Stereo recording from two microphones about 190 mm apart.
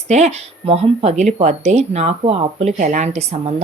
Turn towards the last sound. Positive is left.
turn(degrees=-35)  # may be behind; listen again after turning